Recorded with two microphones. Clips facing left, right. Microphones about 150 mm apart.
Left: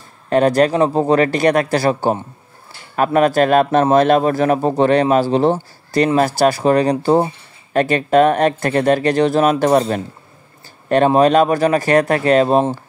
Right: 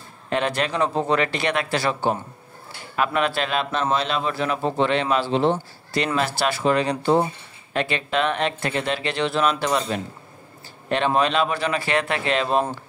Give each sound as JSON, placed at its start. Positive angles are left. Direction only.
{"t": 0.3, "sound": "a man's voice", "side_deg": 40}